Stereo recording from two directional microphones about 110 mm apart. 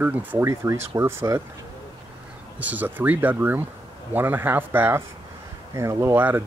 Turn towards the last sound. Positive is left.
turn(degrees=-20)  # may be behind; listen again after turning